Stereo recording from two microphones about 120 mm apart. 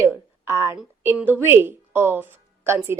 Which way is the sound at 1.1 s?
15° right (ahead or behind).